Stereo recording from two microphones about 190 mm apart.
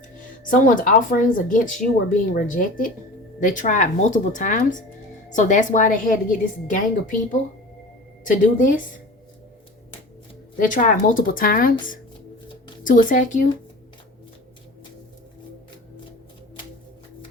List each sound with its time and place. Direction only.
0.5 s speech: 45° left (ahead or behind)
10.6 s speech: 45° left (ahead or behind)
12.8 s speech: 45° left (ahead or behind)